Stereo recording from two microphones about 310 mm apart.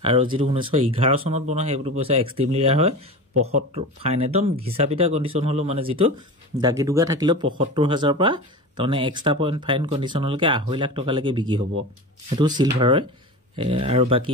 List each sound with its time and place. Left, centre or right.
0.0 s speech: centre